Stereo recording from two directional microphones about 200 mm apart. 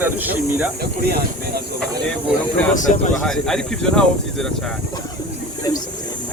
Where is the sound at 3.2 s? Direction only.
5° left (ahead or behind).